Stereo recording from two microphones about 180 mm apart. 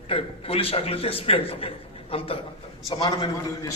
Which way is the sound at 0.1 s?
30° left (ahead or behind).